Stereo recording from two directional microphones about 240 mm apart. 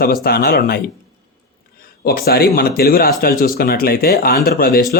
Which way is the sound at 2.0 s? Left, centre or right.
Left.